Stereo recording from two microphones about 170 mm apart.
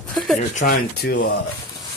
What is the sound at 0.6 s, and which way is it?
Speech, 60° left (ahead or behind).